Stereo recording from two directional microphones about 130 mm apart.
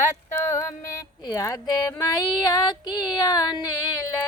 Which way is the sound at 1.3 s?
30° left (ahead or behind).